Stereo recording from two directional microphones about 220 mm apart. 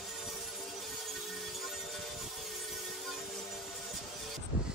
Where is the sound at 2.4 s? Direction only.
Centre (ahead or behind).